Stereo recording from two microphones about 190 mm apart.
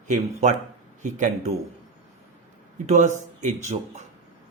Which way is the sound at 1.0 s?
40° right (ahead or behind).